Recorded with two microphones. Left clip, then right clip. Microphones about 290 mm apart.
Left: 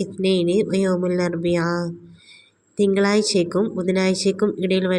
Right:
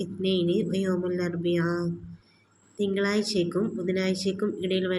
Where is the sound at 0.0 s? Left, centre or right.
Left.